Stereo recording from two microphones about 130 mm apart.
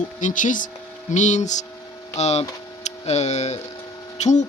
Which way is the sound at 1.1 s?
65° left (ahead or behind).